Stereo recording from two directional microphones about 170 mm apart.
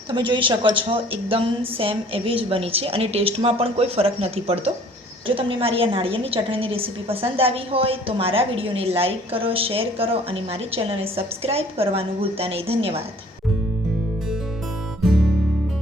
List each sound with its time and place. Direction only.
0.1 s a woman's voice: 30° right (ahead or behind)